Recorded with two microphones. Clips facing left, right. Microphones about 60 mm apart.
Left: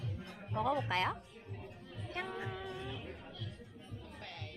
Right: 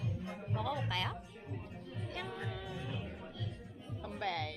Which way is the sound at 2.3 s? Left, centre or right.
Centre.